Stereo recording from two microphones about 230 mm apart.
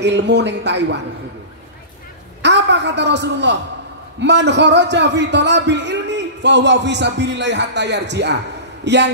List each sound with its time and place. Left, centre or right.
0.0 s a man's voice: right
2.4 s a man's voice: right